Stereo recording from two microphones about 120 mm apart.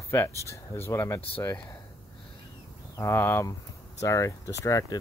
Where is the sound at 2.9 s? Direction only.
20° left (ahead or behind).